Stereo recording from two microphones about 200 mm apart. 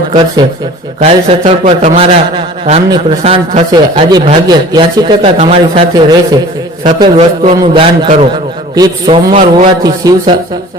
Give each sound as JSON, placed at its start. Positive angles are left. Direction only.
{"t": 0.9, "sound": "a man's voice", "side_deg": -30}
{"t": 9.3, "sound": "a man's voice", "side_deg": -35}
{"t": 9.8, "sound": "a man's voice", "side_deg": -20}